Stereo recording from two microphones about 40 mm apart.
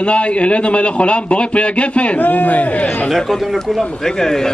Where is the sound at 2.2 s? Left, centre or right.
Left.